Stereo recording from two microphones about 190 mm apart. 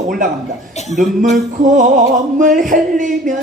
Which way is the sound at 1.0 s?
45° right (ahead or behind).